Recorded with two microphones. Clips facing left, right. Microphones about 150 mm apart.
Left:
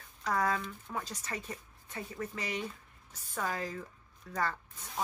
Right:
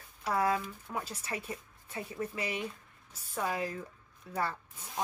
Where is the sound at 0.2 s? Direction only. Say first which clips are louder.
Right 2 dB; 10° right (ahead or behind).